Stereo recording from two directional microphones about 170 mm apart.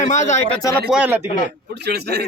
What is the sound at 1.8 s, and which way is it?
Speech, 75° right (ahead or behind).